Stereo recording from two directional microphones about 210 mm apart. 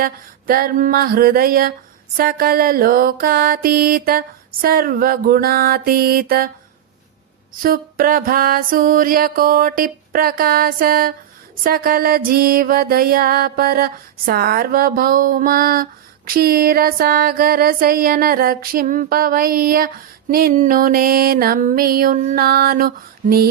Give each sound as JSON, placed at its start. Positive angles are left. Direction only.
{"t": 0.0, "sound": "music", "side_deg": -45}
{"t": 7.6, "sound": "music", "side_deg": -45}